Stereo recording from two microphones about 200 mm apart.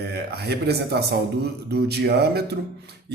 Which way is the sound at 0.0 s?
55° right (ahead or behind).